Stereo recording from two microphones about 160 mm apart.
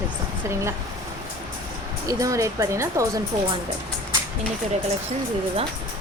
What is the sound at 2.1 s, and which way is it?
Speech, 20° right (ahead or behind).